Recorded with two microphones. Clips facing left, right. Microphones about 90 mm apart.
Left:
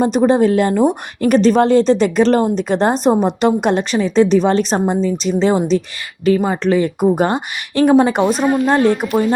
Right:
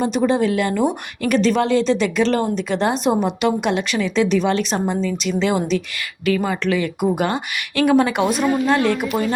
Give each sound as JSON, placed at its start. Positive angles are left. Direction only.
{"t": 0.0, "sound": "speech", "side_deg": 40}